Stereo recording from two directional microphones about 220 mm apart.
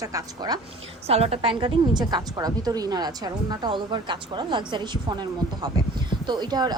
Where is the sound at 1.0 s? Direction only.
25° right (ahead or behind).